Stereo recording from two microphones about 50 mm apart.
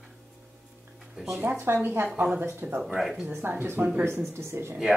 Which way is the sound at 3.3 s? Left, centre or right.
Right.